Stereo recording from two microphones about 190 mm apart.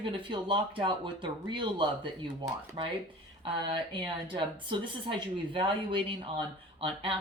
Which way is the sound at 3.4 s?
25° right (ahead or behind).